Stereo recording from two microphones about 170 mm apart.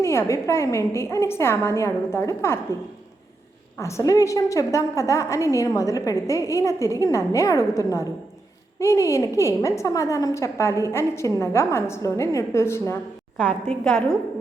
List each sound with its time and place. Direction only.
0.0 s a woman's voice: 15° left (ahead or behind)
3.8 s a woman's voice: 15° left (ahead or behind)
13.7 s a woman's voice: centre (ahead or behind)